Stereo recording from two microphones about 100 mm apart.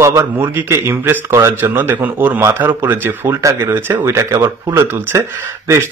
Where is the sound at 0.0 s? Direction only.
25° right (ahead or behind).